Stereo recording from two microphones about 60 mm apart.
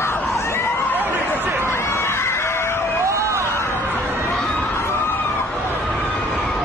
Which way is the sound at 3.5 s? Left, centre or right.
Left.